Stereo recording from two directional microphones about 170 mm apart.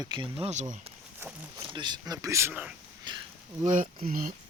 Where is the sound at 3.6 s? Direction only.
50° right (ahead or behind).